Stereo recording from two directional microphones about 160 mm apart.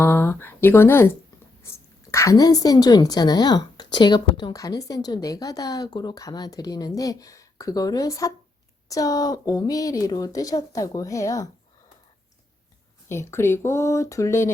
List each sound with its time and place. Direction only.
0.0 s a woman's voice: 15° left (ahead or behind)
13.1 s speech: 15° left (ahead or behind)